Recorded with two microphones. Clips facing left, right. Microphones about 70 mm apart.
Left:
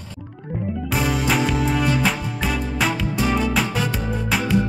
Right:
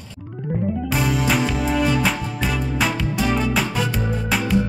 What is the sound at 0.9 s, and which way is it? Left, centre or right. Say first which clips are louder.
Music: left 1 dB; centre.